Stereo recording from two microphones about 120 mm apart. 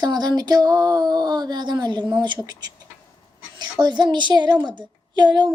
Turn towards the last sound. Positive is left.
turn(degrees=-35)  # may be behind; listen again after turning